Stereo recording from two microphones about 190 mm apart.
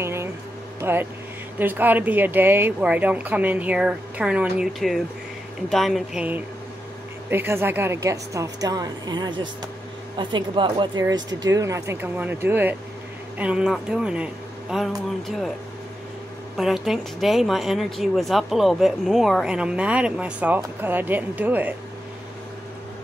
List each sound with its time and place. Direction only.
0.0 s a sound: 15° right (ahead or behind)
0.7 s speech: 10° right (ahead or behind)
16.5 s speech: centre (ahead or behind)